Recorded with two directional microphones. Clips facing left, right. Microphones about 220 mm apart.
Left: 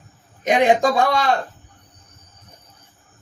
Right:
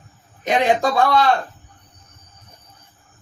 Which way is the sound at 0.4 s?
15° left (ahead or behind).